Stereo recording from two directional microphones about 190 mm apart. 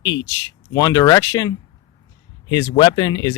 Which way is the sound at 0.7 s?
20° left (ahead or behind).